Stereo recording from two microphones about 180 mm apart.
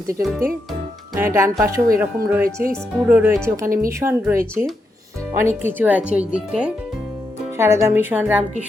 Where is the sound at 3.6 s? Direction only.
50° right (ahead or behind).